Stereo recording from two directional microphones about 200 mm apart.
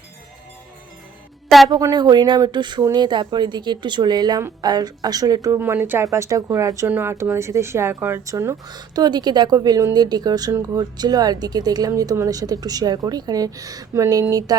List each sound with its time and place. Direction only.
1.5 s a woman's voice: centre (ahead or behind)
1.7 s speech: 20° right (ahead or behind)